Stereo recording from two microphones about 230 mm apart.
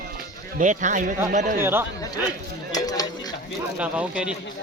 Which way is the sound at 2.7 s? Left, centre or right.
Centre.